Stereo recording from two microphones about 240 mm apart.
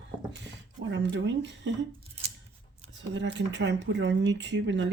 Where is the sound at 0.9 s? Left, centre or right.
Right.